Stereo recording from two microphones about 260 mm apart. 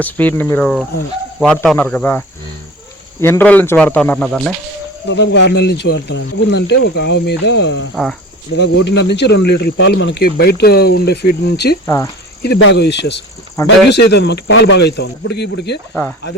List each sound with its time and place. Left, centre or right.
0.0 s speech: centre
5.0 s speech: left
13.6 s speech: centre
13.9 s speech: left